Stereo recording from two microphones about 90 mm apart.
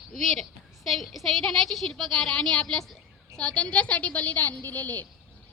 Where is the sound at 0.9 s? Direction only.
Centre (ahead or behind); by 5.0 s 20° left (ahead or behind).